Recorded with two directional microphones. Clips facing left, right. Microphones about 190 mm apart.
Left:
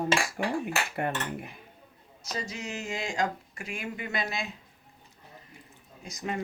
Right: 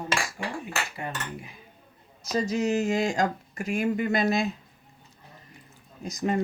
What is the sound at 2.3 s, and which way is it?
Speech, 40° right (ahead or behind).